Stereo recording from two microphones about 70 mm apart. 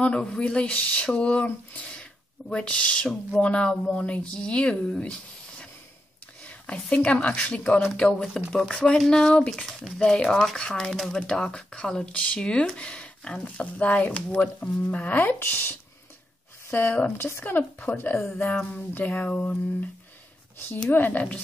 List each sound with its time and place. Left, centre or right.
0.0 s speech: centre; by 15.7 s left
16.7 s speech: left
20.9 s speech: left